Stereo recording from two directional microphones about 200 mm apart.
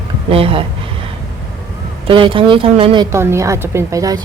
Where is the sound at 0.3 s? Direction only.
25° right (ahead or behind).